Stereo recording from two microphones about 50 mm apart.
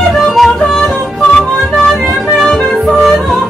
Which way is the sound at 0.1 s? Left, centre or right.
Centre.